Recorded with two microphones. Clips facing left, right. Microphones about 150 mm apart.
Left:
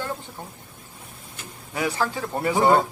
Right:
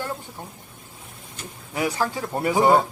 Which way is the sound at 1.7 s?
15° right (ahead or behind).